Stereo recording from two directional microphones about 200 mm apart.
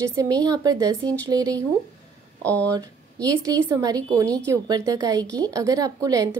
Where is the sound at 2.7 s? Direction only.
20° right (ahead or behind).